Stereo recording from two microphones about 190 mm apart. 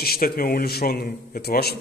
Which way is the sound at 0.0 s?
50° left (ahead or behind).